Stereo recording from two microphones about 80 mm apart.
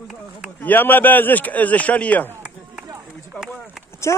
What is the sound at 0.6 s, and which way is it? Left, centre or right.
Speech, left.